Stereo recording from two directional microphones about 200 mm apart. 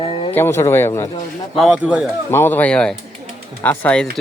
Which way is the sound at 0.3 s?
10° left (ahead or behind).